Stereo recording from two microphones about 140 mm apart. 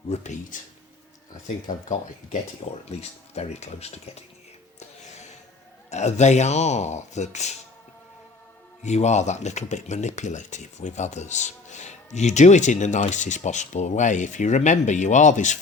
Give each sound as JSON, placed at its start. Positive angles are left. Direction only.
{"t": 0.1, "sound": "speech", "side_deg": 55}
{"t": 1.6, "sound": "speech", "side_deg": 65}
{"t": 3.0, "sound": "speech", "side_deg": 50}
{"t": 4.8, "sound": "music", "side_deg": 55}
{"t": 5.9, "sound": "speech", "side_deg": 55}
{"t": 8.8, "sound": "speech", "side_deg": 55}